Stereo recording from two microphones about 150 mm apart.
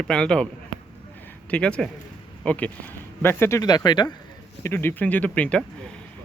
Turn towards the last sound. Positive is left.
turn(degrees=10)  # may be behind; listen again after turning